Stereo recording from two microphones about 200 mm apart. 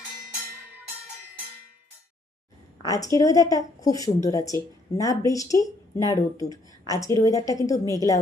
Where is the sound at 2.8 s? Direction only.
20° left (ahead or behind).